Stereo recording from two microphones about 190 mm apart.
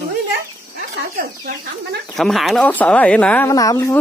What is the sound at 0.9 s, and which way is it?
Chicken, 60° right (ahead or behind).